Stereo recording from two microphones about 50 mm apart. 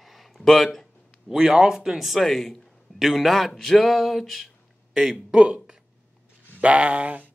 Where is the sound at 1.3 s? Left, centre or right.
Centre.